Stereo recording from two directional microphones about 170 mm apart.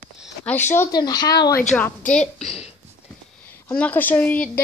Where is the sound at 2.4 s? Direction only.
35° left (ahead or behind).